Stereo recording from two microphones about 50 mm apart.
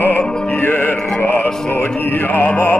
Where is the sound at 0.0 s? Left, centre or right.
Left.